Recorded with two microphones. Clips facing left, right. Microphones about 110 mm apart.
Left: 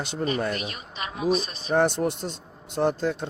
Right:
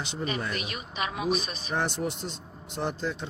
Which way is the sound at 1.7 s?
50° left (ahead or behind).